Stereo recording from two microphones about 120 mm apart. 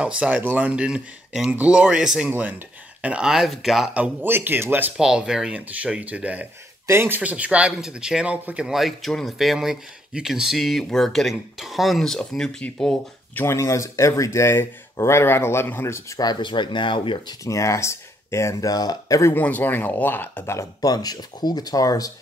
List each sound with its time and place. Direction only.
0.0 s speech: 10° right (ahead or behind)
4.9 s speech: 5° right (ahead or behind)
6.9 s speech: 20° right (ahead or behind)
7.2 s speech: 10° right (ahead or behind); by 12.9 s 5° left (ahead or behind)
13.3 s speech: 20° left (ahead or behind)
16.2 s speech: 35° left (ahead or behind)
17.5 s speech: 25° left (ahead or behind)
19.3 s speech: 15° left (ahead or behind); by 22.1 s 30° left (ahead or behind)